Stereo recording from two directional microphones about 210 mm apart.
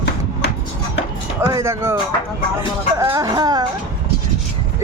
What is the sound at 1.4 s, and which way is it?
Speech, 10° right (ahead or behind).